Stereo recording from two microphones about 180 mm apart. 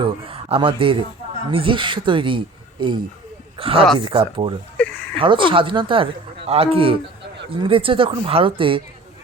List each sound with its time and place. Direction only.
0.0 s speech: 30° right (ahead or behind)
4.8 s a sound: 5° left (ahead or behind)
5.1 s speech: 30° right (ahead or behind)